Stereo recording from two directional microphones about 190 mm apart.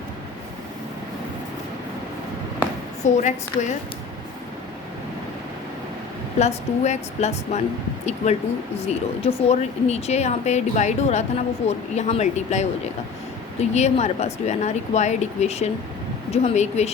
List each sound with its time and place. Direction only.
3.0 s speech: 40° left (ahead or behind)
6.4 s speech: 35° left (ahead or behind)